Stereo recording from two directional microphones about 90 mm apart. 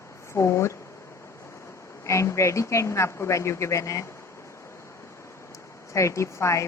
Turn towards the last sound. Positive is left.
turn(degrees=35)  # may be behind; listen again after turning